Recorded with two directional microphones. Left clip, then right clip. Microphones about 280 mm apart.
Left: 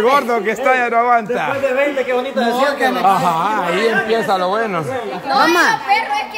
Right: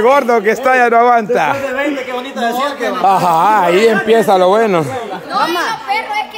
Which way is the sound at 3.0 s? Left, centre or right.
Centre.